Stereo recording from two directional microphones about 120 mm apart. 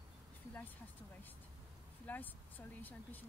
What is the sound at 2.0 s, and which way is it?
Speech, 15° left (ahead or behind).